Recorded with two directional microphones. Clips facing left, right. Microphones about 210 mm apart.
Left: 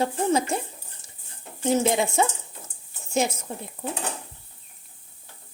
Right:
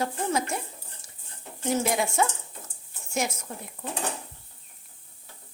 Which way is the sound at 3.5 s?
25° left (ahead or behind).